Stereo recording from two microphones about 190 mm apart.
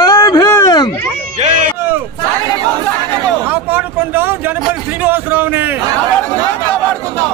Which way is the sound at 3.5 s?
10° right (ahead or behind).